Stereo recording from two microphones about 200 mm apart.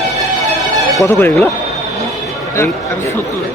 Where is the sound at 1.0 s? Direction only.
10° left (ahead or behind).